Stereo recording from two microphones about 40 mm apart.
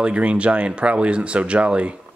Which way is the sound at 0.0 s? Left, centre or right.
Right.